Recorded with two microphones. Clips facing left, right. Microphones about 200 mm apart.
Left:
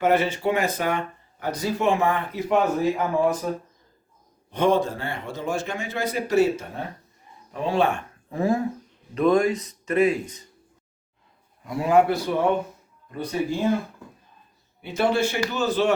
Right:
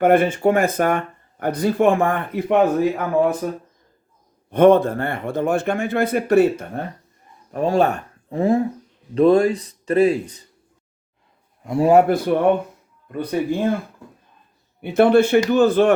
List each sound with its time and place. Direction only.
0.0 s speech: 55° right (ahead or behind)
4.5 s speech: 55° right (ahead or behind)
7.5 s speech: 45° right (ahead or behind)
8.3 s speech: 30° right (ahead or behind)
11.6 s a man's voice: 25° right (ahead or behind)
11.9 s speech: 50° right (ahead or behind)
14.8 s speech: 60° right (ahead or behind)